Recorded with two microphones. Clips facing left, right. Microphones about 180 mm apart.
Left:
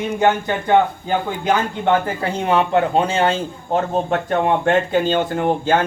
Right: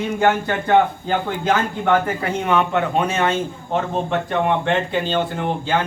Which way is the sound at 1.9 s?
30° left (ahead or behind).